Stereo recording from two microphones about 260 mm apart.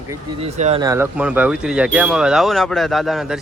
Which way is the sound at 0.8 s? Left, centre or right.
Centre.